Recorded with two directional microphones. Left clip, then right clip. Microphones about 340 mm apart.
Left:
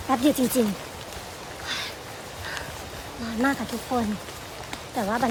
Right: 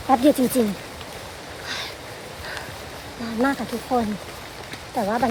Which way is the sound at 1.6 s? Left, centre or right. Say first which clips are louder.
Right 1 dB; centre.